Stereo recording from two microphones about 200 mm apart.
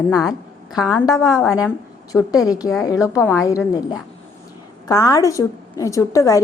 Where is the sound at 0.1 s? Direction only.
Centre (ahead or behind).